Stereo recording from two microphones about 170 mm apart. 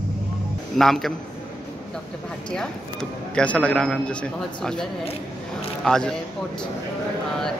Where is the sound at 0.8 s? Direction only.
Centre (ahead or behind).